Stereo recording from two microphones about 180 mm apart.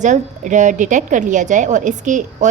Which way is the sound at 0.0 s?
45° right (ahead or behind).